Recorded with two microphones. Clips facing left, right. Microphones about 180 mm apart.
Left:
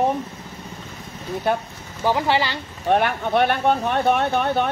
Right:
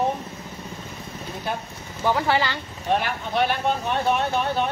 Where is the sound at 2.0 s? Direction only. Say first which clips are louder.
Left 2 dB; 15° left (ahead or behind).